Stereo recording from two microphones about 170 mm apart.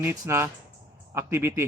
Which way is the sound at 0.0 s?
15° right (ahead or behind).